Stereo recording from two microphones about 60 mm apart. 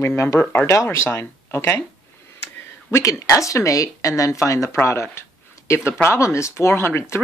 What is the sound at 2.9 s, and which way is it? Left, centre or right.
Speech, left.